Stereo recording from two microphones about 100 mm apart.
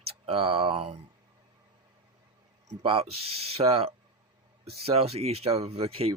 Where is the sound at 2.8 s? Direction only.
75° right (ahead or behind).